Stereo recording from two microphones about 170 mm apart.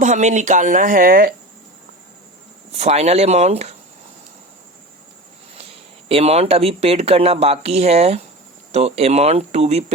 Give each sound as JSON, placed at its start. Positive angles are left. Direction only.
{"t": 0.0, "sound": "speech", "side_deg": -45}
{"t": 2.7, "sound": "speech", "side_deg": -40}
{"t": 6.1, "sound": "speech", "side_deg": -35}